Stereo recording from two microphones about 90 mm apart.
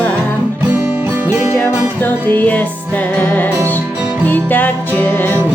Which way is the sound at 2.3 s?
20° left (ahead or behind).